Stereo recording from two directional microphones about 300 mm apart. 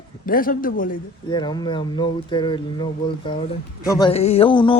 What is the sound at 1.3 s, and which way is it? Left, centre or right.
A man's voice, centre.